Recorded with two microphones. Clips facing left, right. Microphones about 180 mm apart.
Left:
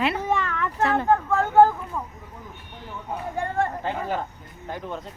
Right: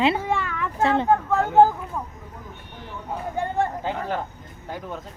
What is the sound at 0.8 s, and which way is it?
Speech, 25° right (ahead or behind).